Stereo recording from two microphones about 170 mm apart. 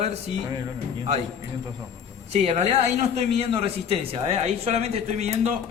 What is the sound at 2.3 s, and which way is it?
A man's voice, 40° right (ahead or behind).